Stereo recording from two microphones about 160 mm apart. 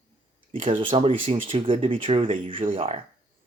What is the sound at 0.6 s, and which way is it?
Speech, 35° right (ahead or behind).